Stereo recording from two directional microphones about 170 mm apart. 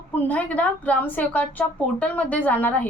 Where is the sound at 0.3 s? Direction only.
10° left (ahead or behind).